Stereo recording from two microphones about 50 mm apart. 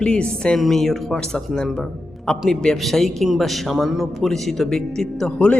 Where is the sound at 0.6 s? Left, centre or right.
Centre.